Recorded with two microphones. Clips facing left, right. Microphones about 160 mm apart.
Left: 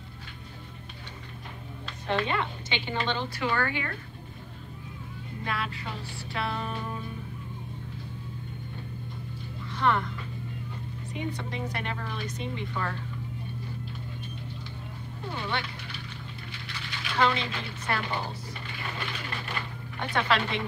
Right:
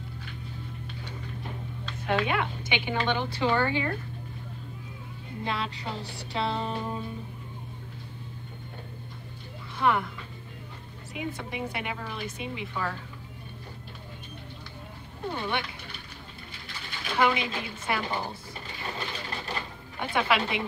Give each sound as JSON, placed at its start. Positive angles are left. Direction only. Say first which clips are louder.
{"t": 2.0, "sound": "a woman's voice", "louder": "right 1 dB", "side_deg": -10}
{"t": 3.3, "sound": "music", "louder": "right 5 dB", "side_deg": -25}
{"t": 5.4, "sound": "music", "louder": "right 2 dB", "side_deg": -25}
{"t": 9.8, "sound": "speech", "louder": "right 1 dB", "side_deg": -10}
{"t": 11.1, "sound": "speech", "louder": "even", "side_deg": -5}
{"t": 15.3, "sound": "a woman's voice", "louder": "right 1 dB", "side_deg": -15}
{"t": 17.2, "sound": "a woman's voice", "louder": "right 1 dB", "side_deg": -10}
{"t": 18.9, "sound": "vehicle", "louder": "right 1 dB", "side_deg": -30}
{"t": 20.0, "sound": "a woman's voice", "louder": "right 1 dB", "side_deg": -10}